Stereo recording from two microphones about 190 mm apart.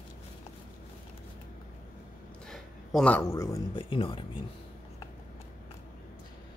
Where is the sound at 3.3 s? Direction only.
20° left (ahead or behind).